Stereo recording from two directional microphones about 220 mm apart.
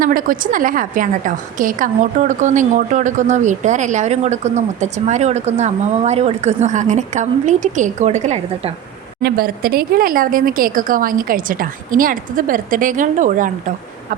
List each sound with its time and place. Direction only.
0.0 s a woman's voice: 40° right (ahead or behind)
9.2 s a woman's voice: 45° right (ahead or behind)